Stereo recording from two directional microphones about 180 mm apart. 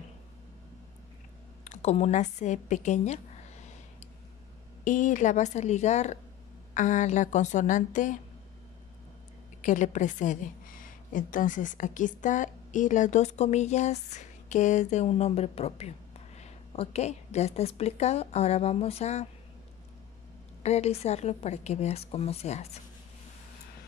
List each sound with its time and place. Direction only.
1.6 s a woman's voice: 40° left (ahead or behind)
4.8 s a woman's voice: 45° left (ahead or behind)
9.6 s a woman's voice: 45° left (ahead or behind)
20.6 s a woman's voice: 35° left (ahead or behind)